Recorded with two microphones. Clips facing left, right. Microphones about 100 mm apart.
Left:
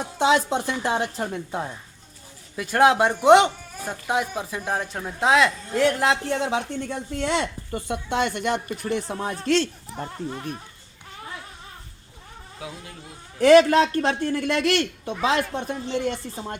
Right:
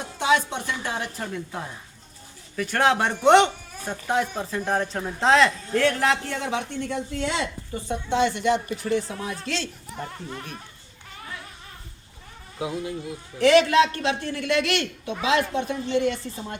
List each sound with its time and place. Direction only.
0.2 s a woman's voice: 25° left (ahead or behind)
2.6 s speech: 15° left (ahead or behind)
7.7 s speech: 60° left (ahead or behind)
9.9 s a woman's voice: 25° left (ahead or behind)
12.5 s speech: 20° right (ahead or behind)
13.4 s speech: 45° left (ahead or behind)